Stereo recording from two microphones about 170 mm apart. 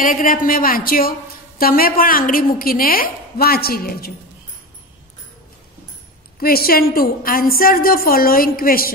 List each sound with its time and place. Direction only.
0.0 s a woman's voice: 55° left (ahead or behind)
6.4 s a woman's voice: 60° left (ahead or behind)